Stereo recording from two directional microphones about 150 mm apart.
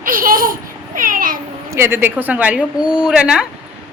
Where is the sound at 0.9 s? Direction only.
65° right (ahead or behind).